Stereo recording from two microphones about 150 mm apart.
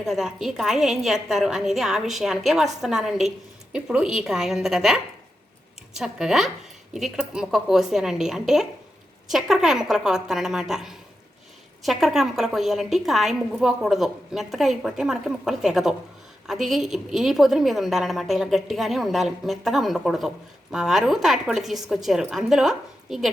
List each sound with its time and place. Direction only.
0.0 s a woman's voice: 5° right (ahead or behind)